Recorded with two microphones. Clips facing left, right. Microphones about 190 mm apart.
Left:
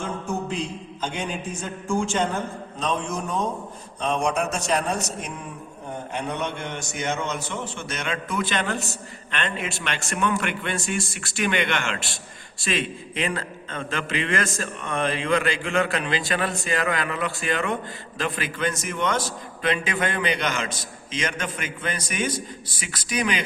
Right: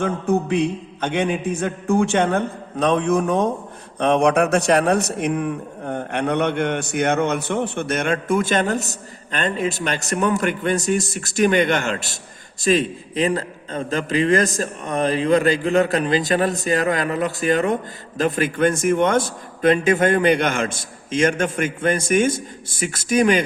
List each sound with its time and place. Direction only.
0.0 s a man's voice: 65° right (ahead or behind); by 23.4 s 50° right (ahead or behind)